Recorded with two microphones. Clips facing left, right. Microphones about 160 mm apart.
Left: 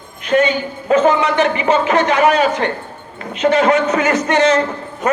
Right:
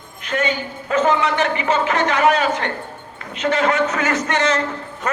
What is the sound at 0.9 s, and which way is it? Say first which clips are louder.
A man's voice: left 4 dB; 20° left (ahead or behind).